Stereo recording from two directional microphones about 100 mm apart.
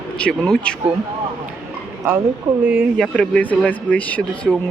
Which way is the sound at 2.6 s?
15° right (ahead or behind).